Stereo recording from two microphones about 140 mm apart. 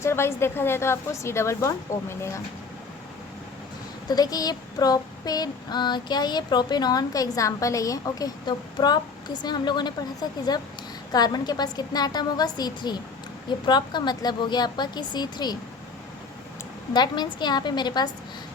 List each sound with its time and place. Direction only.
0.0 s child singing: 20° left (ahead or behind)
4.1 s child singing: 25° left (ahead or behind)
11.1 s child singing: 30° left (ahead or behind)
13.7 s speech: 30° left (ahead or behind)
16.9 s speech: 30° left (ahead or behind)